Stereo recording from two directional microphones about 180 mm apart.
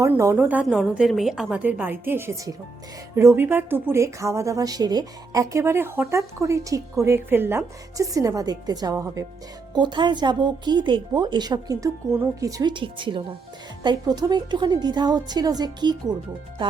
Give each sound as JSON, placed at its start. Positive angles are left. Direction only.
{"t": 0.0, "sound": "a woman's voice", "side_deg": -15}